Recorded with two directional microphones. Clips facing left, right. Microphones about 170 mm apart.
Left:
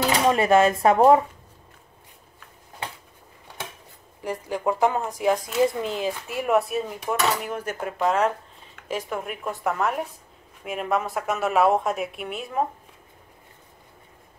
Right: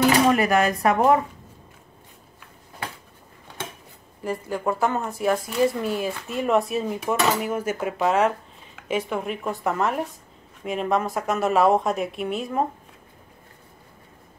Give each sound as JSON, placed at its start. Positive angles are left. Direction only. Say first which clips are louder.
{"t": 0.0, "sound": "speech", "louder": "right 3 dB", "side_deg": 25}
{"t": 4.2, "sound": "speech", "louder": "right 1 dB", "side_deg": 15}